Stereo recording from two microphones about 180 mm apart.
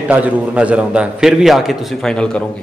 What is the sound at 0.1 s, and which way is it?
A man's voice, 10° right (ahead or behind).